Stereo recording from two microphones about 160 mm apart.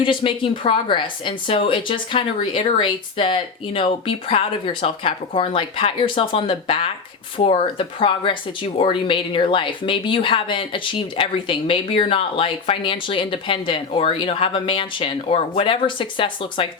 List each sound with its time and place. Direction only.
0.0 s speech: 30° left (ahead or behind)